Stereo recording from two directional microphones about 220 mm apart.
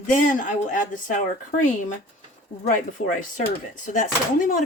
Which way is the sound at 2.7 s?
35° left (ahead or behind).